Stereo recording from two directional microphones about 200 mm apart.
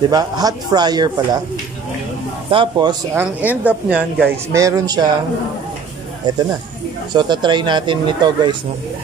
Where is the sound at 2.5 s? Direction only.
25° right (ahead or behind).